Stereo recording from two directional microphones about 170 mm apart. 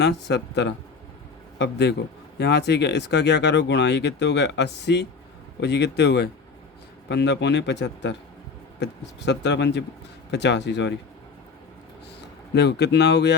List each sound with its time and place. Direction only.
0.0 s speech: 90° left
12.5 s speech: 80° left